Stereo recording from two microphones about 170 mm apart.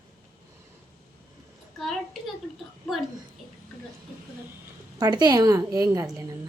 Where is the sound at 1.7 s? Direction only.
Centre (ahead or behind).